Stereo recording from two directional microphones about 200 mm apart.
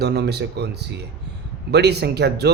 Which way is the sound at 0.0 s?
55° right (ahead or behind).